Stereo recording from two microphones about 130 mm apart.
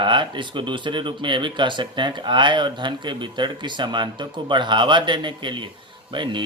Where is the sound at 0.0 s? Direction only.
40° right (ahead or behind).